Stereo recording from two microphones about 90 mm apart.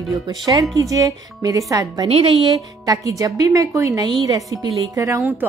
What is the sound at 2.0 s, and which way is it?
Speech, 90° right.